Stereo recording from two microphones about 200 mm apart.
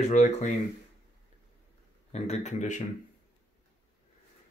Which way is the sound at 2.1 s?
35° left (ahead or behind).